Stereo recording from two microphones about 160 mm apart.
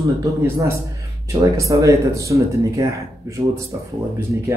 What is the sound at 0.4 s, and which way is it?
A man's voice, 15° right (ahead or behind).